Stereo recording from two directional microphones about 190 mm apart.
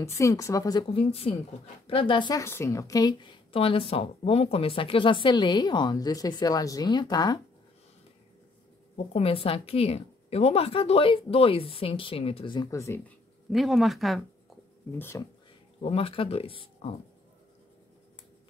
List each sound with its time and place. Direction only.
0.0 s a woman's voice: 15° left (ahead or behind)
8.9 s a woman's voice: 30° left (ahead or behind); by 13.0 s 15° left (ahead or behind)
13.5 s speech: centre (ahead or behind)
14.9 s a woman's voice: 10° left (ahead or behind)
15.8 s a woman's voice: 30° left (ahead or behind)